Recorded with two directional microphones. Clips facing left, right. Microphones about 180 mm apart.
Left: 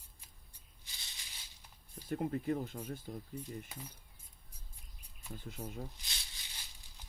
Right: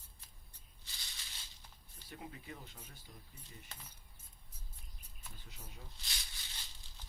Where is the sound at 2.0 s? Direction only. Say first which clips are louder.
Left 15 dB; 50° left (ahead or behind).